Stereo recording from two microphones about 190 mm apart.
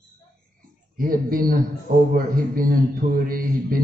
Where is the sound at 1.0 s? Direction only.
50° right (ahead or behind).